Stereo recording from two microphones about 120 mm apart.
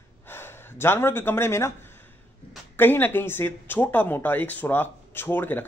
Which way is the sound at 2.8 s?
15° left (ahead or behind).